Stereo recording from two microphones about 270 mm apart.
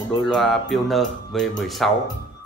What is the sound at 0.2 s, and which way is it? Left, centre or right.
Speech, centre.